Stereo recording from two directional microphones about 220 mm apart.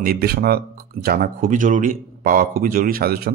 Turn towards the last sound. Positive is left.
turn(degrees=-45)  # may be behind; listen again after turning